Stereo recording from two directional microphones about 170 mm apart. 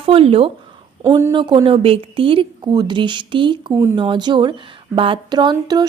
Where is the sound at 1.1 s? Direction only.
15° right (ahead or behind).